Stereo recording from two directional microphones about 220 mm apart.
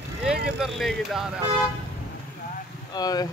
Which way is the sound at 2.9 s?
15° left (ahead or behind).